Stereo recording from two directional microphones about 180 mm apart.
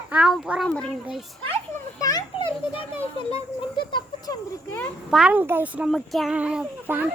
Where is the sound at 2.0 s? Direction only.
20° left (ahead or behind).